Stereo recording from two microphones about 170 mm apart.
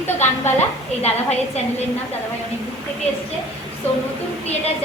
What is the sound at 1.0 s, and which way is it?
Speech, 40° left (ahead or behind).